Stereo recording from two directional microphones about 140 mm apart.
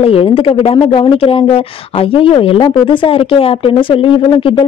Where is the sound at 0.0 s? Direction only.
40° left (ahead or behind).